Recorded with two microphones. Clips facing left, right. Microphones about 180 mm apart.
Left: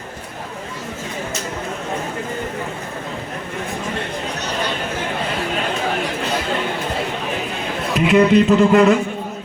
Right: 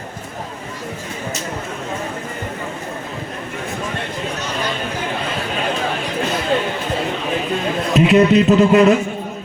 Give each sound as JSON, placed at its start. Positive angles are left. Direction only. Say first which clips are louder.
{"t": 7.9, "sound": "a man's voice", "louder": "right 1 dB", "side_deg": -20}